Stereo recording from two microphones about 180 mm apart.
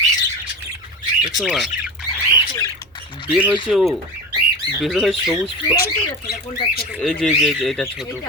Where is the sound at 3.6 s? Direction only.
Centre (ahead or behind).